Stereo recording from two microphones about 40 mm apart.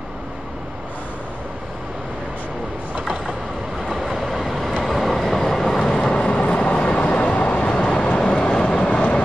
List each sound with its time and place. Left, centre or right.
3.8 s train: centre; by 8.2 s left
8.2 s train: centre